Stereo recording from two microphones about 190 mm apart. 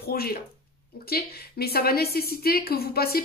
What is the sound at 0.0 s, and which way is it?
A woman's voice, 50° left (ahead or behind).